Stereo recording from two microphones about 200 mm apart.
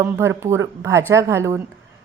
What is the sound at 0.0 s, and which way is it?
A woman's voice, 15° right (ahead or behind).